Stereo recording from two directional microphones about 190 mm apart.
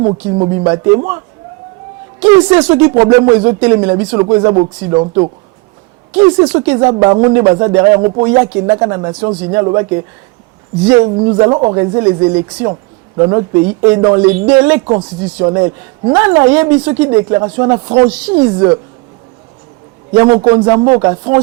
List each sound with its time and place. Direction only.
0.0 s speech: 25° right (ahead or behind)
2.2 s speech: 20° right (ahead or behind)
2.6 s speech: 10° right (ahead or behind)
2.8 s speech: 20° right (ahead or behind)
11.0 s speech: 25° right (ahead or behind)
14.9 s speech: 25° right (ahead or behind)
20.1 s speech: 15° right (ahead or behind)